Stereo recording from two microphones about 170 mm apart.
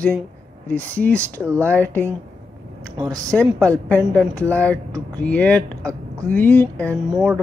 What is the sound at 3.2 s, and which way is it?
Speech, 5° left (ahead or behind).